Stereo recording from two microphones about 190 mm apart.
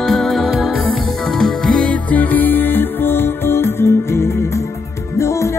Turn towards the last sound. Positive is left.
turn(degrees=15)  # may be behind; listen again after turning